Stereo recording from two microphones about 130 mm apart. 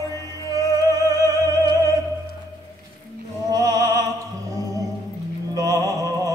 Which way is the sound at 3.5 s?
25° right (ahead or behind).